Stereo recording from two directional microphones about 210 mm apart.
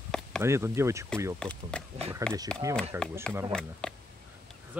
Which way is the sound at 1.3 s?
5° left (ahead or behind).